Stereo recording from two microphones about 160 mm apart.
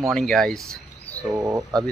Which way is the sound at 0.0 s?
Centre (ahead or behind).